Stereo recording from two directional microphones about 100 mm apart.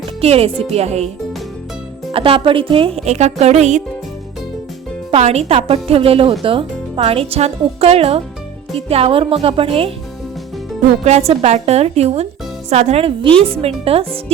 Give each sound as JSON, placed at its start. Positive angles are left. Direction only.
{"t": 0.2, "sound": "a woman's voice", "side_deg": -80}
{"t": 2.1, "sound": "a woman's voice", "side_deg": -65}
{"t": 5.1, "sound": "speech", "side_deg": -90}
{"t": 11.1, "sound": "a woman's voice", "side_deg": -90}